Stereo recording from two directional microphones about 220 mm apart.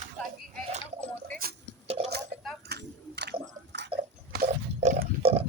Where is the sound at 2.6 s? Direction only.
50° right (ahead or behind).